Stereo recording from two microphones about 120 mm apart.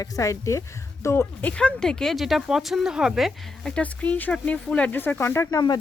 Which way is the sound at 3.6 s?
10° left (ahead or behind).